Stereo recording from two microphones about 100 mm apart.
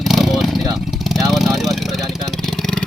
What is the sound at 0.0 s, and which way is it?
Vehicle, centre (ahead or behind).